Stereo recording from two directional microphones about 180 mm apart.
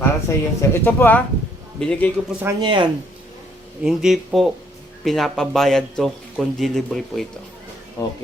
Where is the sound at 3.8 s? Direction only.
Centre (ahead or behind).